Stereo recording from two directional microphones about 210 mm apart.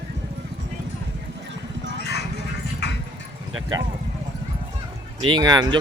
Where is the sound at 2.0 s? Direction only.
50° left (ahead or behind).